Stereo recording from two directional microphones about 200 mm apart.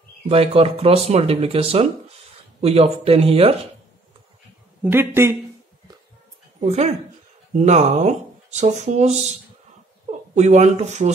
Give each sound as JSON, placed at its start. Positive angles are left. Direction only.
{"t": 0.3, "sound": "speech", "side_deg": -30}
{"t": 4.8, "sound": "speech", "side_deg": -10}
{"t": 6.6, "sound": "speech", "side_deg": -35}